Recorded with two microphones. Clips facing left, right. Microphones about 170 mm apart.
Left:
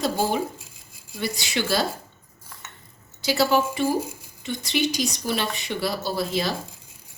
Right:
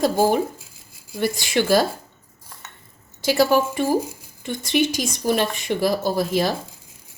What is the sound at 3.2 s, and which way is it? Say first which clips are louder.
Speech: right 3 dB; 50° right (ahead or behind).